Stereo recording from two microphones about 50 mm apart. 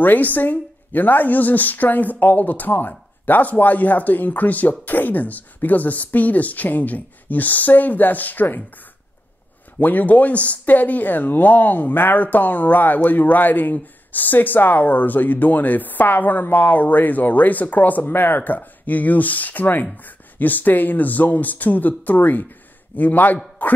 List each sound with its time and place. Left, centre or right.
0.0 s speech: left
9.8 s a man's voice: left